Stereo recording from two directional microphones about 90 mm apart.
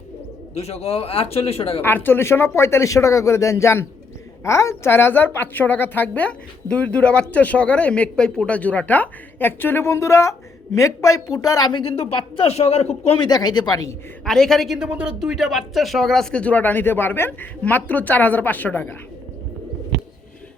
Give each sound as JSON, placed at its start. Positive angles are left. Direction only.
{"t": 0.9, "sound": "speech", "side_deg": 90}
{"t": 1.8, "sound": "a woman's voice", "side_deg": 25}
{"t": 11.7, "sound": "speech", "side_deg": 85}
{"t": 13.2, "sound": "speech", "side_deg": 50}
{"t": 14.3, "sound": "a woman's voice", "side_deg": 5}
{"t": 14.8, "sound": "a woman's voice", "side_deg": -10}